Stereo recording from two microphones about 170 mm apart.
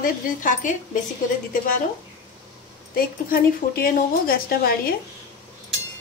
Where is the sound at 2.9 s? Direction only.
60° left (ahead or behind).